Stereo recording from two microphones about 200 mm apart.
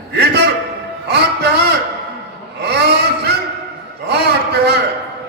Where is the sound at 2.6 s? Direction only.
55° right (ahead or behind).